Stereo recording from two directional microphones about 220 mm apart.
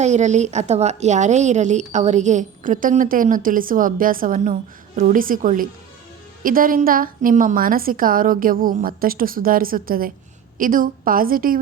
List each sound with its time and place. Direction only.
0.0 s a woman's voice: 30° right (ahead or behind)